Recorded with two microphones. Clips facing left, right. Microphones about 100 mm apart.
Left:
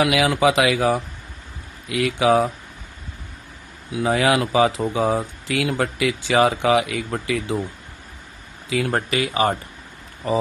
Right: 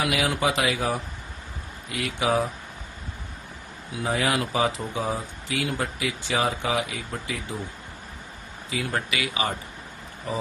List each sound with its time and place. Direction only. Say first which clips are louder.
0.0 s speech: left 7 dB; 90° left
4.0 s speech: left 6 dB; 90° left
8.9 s speech: left 6 dB; 45° left (ahead or behind)